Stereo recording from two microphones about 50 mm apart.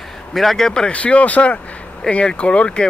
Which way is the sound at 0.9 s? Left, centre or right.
Left.